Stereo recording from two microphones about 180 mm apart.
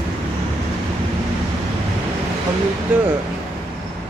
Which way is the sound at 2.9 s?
5° right (ahead or behind).